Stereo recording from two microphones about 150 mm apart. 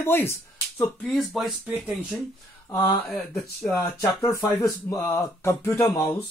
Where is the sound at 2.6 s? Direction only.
25° left (ahead or behind).